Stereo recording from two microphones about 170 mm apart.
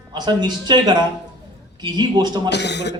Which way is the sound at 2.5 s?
85° left.